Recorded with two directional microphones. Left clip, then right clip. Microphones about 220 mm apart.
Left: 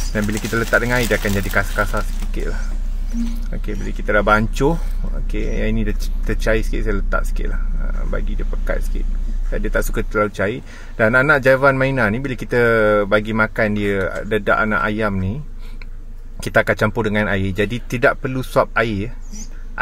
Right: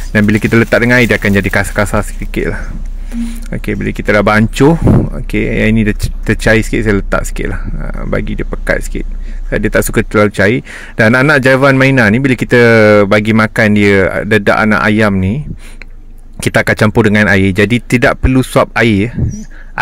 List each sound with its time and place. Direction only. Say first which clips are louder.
0.1 s speech: right 11 dB; 35° right (ahead or behind)